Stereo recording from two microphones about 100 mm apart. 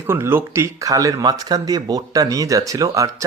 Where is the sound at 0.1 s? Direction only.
25° right (ahead or behind).